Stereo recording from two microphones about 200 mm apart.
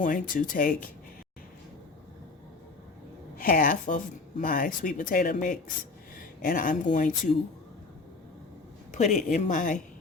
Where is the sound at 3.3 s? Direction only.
45° left (ahead or behind).